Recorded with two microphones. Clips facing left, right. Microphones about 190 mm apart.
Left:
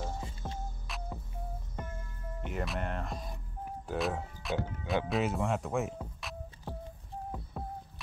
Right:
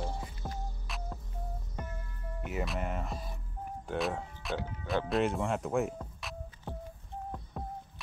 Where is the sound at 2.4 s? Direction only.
Centre (ahead or behind).